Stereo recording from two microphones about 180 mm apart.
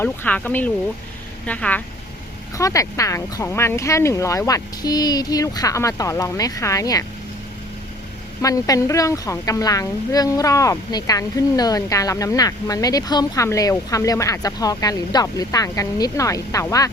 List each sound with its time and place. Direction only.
0.0 s speech: 10° left (ahead or behind)
2.6 s speech: 20° left (ahead or behind)
8.4 s a woman's voice: 20° left (ahead or behind)